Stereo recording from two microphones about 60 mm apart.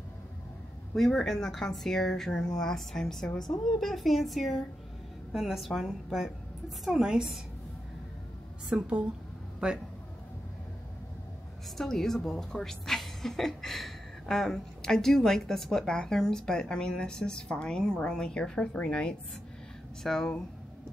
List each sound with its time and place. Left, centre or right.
0.9 s a woman's voice: centre
8.6 s a woman's voice: centre
11.7 s a woman's voice: centre